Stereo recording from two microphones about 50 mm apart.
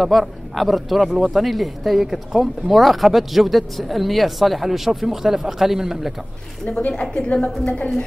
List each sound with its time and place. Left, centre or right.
0.0 s speech: centre
6.9 s a woman's voice: centre